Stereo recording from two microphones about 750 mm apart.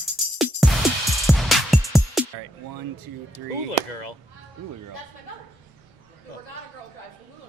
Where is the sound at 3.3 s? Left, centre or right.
Left.